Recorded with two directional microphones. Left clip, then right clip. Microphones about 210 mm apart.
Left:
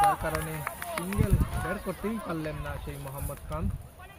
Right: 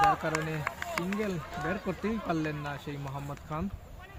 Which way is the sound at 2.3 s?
55° right (ahead or behind).